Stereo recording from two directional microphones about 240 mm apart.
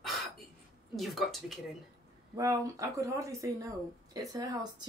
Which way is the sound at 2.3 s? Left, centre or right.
Centre.